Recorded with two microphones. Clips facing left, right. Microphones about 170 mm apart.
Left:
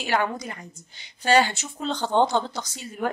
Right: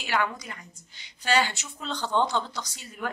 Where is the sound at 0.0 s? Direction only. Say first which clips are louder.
Left 4 dB; 35° left (ahead or behind).